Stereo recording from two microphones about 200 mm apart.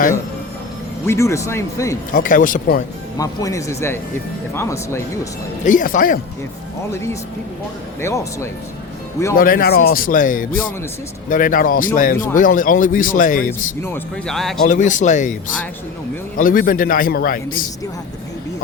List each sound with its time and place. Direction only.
1.0 s speech: 15° left (ahead or behind)
2.1 s speech: 40° left (ahead or behind)
3.2 s speech: 15° left (ahead or behind)
5.6 s speech: 40° left (ahead or behind)
6.9 s speech: 15° left (ahead or behind)
9.3 s speech: 45° left (ahead or behind)
13.8 s speech: 5° left (ahead or behind)
14.7 s speech: 40° left (ahead or behind)
16.4 s speech: 45° left (ahead or behind)